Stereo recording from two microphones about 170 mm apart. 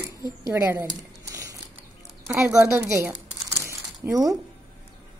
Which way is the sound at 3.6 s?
20° right (ahead or behind).